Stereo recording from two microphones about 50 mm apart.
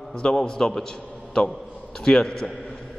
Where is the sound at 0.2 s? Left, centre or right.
Centre.